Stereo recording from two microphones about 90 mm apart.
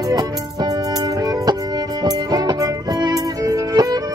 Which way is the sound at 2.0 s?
50° right (ahead or behind).